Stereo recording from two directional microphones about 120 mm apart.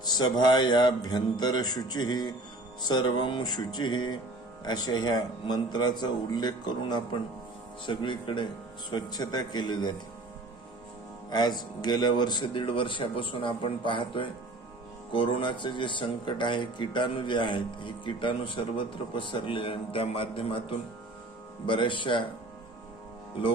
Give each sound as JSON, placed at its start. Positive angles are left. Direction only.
{"t": 0.0, "sound": "a man's voice", "side_deg": 35}
{"t": 11.3, "sound": "speech", "side_deg": 35}